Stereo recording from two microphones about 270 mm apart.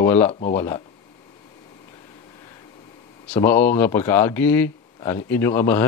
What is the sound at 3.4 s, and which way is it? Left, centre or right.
A man's voice, centre.